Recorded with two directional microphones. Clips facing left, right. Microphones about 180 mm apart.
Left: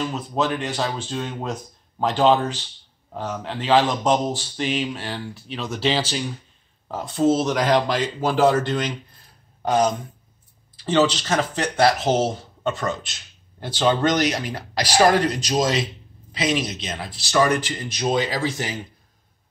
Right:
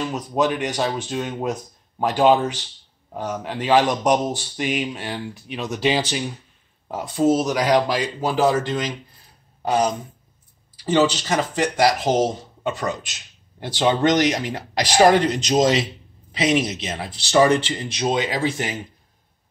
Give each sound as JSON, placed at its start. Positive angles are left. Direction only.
{"t": 0.0, "sound": "speech", "side_deg": -15}
{"t": 10.8, "sound": "speech", "side_deg": -10}